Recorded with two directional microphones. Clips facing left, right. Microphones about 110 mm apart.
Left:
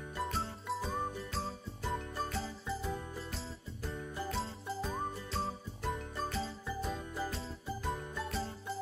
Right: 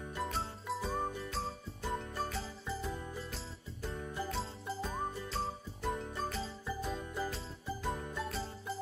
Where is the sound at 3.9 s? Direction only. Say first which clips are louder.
Even; centre (ahead or behind).